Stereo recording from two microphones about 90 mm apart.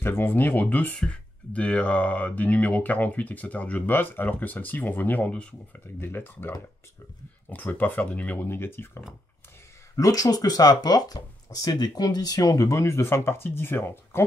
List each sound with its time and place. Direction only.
0.0 s speech: 25° left (ahead or behind)
9.9 s speech: 40° left (ahead or behind); by 14.2 s 25° left (ahead or behind)